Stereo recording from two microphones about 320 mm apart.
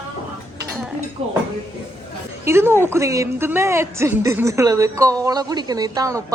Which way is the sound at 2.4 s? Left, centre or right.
Centre.